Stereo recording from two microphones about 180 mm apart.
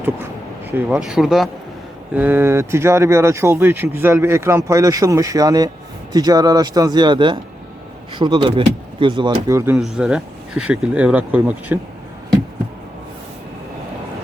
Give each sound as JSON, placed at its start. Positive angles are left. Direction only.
{"t": 0.7, "sound": "speech", "side_deg": -5}
{"t": 9.7, "sound": "speech", "side_deg": -5}